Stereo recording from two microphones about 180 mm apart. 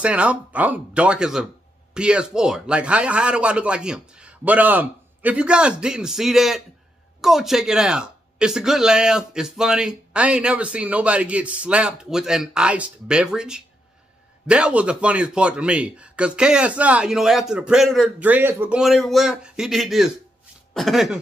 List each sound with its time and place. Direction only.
0.0 s speech: 5° right (ahead or behind)